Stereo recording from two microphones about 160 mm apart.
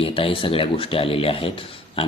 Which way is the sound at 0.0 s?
35° left (ahead or behind).